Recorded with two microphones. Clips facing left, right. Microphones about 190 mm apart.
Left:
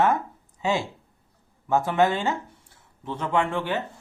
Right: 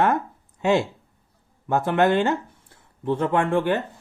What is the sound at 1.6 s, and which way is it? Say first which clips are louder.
Speech: right 2 dB; 60° right (ahead or behind).